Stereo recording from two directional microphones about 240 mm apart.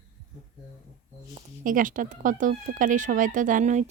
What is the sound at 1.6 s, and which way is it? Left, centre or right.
Speech, right.